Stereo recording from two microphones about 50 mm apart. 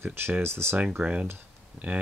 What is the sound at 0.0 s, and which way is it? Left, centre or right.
Speech, right.